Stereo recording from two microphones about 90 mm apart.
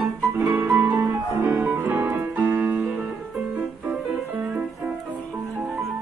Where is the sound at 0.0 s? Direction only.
25° right (ahead or behind).